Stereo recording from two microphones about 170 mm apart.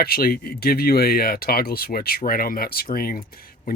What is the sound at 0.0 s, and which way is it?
Speech, 65° left (ahead or behind).